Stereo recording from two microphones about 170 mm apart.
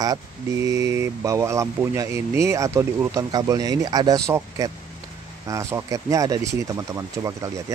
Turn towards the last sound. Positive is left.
turn(degrees=-20)  # may be behind; listen again after turning